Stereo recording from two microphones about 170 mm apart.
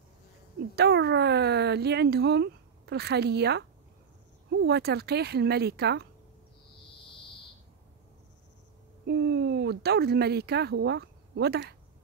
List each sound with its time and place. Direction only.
0.7 s speech: 75° right (ahead or behind)
9.0 s speech: 75° right (ahead or behind)